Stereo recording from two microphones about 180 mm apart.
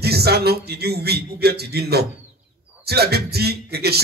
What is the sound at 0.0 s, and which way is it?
A man's voice, 60° right (ahead or behind).